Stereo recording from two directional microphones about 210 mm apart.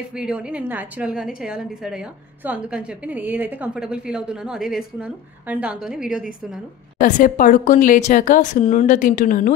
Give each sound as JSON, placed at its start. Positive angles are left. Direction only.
{"t": 0.1, "sound": "a woman's voice", "side_deg": -5}
{"t": 7.0, "sound": "a woman's voice", "side_deg": 40}